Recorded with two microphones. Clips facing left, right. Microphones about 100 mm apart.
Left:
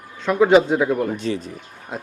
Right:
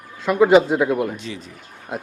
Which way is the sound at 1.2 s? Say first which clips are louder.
Left 8 dB; 45° left (ahead or behind).